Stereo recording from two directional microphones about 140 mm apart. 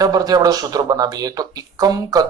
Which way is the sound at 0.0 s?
25° right (ahead or behind).